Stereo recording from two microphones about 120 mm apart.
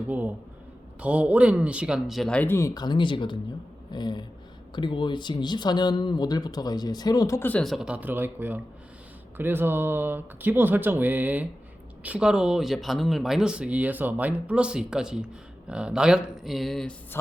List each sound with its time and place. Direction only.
1.0 s speech: 10° right (ahead or behind)
2.4 s speech: 20° left (ahead or behind)
7.6 s speech: centre (ahead or behind)